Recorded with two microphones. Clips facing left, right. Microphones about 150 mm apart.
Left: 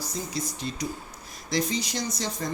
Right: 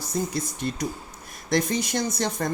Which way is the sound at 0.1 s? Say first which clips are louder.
Right 8 dB; 55° right (ahead or behind).